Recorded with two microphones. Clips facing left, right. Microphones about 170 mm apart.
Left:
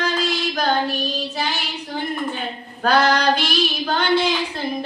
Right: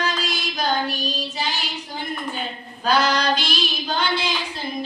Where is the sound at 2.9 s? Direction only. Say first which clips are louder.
Left 3 dB; 65° left (ahead or behind).